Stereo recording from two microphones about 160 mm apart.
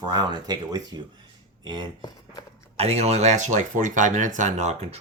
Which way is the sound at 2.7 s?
40° right (ahead or behind).